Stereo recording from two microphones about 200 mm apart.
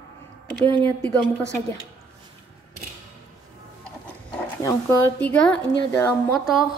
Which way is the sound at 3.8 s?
5° left (ahead or behind).